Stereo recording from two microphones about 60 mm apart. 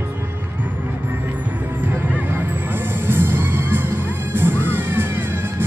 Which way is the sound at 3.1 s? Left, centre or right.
Right.